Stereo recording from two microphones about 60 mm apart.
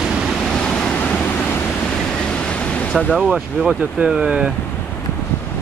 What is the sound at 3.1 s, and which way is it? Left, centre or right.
Speech, centre.